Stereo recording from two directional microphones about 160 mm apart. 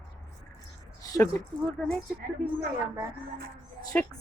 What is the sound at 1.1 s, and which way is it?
Speech, 15° left (ahead or behind).